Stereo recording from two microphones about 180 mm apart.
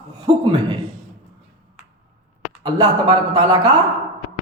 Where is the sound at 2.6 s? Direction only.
20° right (ahead or behind).